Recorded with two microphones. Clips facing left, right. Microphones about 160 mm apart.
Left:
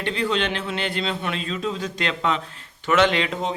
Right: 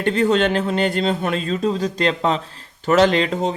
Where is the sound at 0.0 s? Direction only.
45° right (ahead or behind).